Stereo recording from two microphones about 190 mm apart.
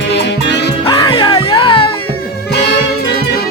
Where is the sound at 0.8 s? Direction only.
25° left (ahead or behind).